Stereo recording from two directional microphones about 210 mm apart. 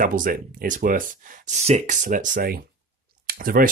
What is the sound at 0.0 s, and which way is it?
Speech, 40° right (ahead or behind).